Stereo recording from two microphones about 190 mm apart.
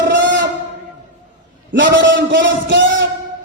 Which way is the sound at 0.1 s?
70° right (ahead or behind).